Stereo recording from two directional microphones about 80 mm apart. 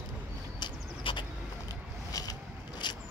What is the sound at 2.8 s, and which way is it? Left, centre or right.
Zipper, left.